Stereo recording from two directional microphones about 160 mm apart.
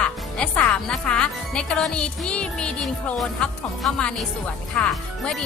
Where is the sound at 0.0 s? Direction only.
5° left (ahead or behind).